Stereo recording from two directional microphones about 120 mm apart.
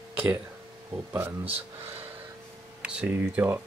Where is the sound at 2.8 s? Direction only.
10° right (ahead or behind).